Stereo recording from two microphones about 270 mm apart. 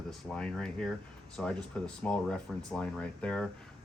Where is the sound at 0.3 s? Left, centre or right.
Centre.